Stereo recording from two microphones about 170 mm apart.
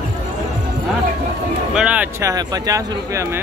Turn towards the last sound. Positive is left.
turn(degrees=-20)  # may be behind; listen again after turning